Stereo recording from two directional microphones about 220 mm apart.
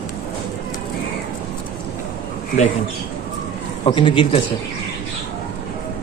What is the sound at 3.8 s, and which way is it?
Speech, 25° left (ahead or behind).